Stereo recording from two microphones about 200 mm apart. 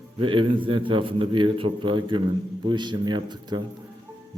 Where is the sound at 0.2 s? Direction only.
25° right (ahead or behind).